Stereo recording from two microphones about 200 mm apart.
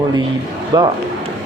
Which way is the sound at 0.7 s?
20° right (ahead or behind).